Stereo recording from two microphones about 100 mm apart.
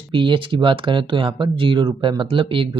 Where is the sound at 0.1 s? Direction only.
55° right (ahead or behind).